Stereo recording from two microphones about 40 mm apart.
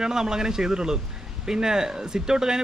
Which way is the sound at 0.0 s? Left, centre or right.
Centre.